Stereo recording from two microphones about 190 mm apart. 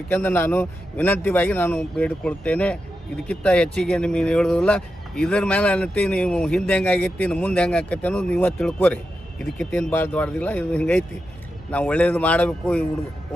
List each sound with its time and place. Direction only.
0.1 s speech: 10° left (ahead or behind)